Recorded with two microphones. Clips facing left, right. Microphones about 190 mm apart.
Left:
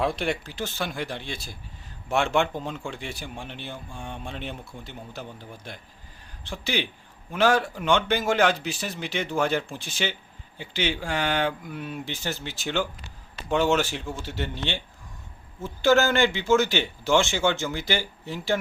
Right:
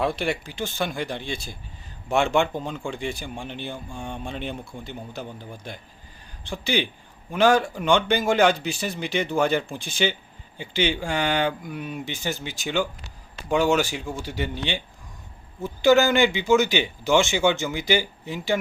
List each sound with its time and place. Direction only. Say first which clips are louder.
0.0 s a man's voice: right 1 dB; centre (ahead or behind)